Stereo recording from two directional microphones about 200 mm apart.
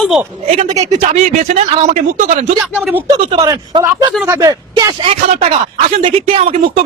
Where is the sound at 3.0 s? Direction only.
15° right (ahead or behind).